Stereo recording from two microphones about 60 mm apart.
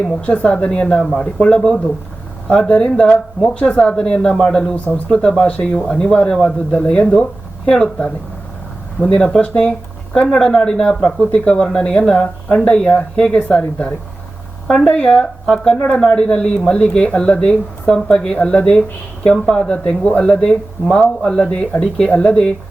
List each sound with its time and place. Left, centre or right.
0.2 s speech: centre
4.7 s speech: left
21.5 s speech: left